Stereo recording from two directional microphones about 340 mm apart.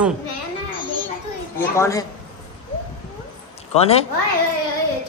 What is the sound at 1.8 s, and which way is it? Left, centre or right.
Speech, centre.